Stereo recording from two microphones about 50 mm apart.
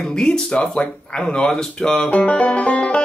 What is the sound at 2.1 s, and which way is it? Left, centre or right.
Music, left.